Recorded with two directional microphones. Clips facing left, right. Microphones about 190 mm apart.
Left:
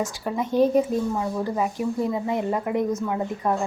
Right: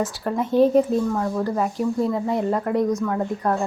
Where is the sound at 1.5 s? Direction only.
5° left (ahead or behind).